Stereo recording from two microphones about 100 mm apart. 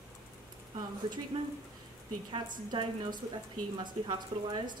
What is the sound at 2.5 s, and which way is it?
A woman's voice, 50° right (ahead or behind).